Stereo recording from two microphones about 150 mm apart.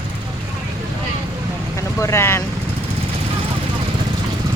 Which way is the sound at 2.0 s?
20° left (ahead or behind).